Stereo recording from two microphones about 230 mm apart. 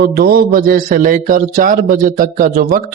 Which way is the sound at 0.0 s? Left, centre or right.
Right.